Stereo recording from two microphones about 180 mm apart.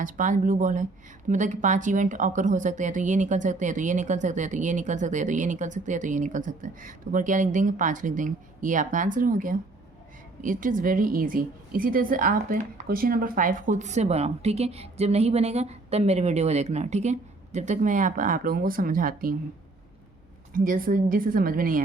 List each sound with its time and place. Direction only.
0.0 s a woman's voice: 45° right (ahead or behind)
20.5 s a woman's voice: 50° right (ahead or behind)